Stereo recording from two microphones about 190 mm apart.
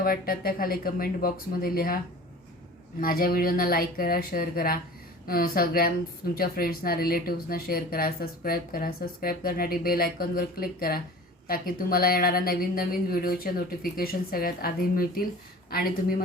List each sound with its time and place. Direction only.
0.0 s speech: 50° left (ahead or behind)
3.0 s speech: 50° left (ahead or behind)